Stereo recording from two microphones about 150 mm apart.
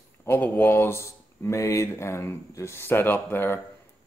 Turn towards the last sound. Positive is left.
turn(degrees=15)  # may be behind; listen again after turning